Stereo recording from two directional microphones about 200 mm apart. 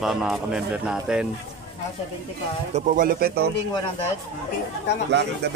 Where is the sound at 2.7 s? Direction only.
40° right (ahead or behind).